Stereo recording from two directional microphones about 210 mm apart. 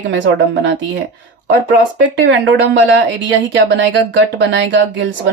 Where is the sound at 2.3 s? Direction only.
55° right (ahead or behind).